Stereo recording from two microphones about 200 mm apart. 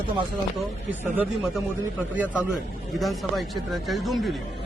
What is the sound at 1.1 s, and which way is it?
Speech, 10° right (ahead or behind).